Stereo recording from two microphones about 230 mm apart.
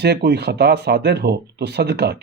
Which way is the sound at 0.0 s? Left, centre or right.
Right.